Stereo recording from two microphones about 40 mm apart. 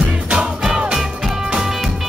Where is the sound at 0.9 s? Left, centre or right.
Centre.